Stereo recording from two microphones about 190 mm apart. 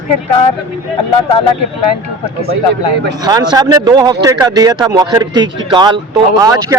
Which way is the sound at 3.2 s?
20° right (ahead or behind).